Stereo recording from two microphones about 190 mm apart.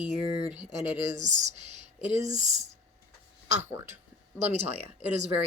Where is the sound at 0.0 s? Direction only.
10° right (ahead or behind).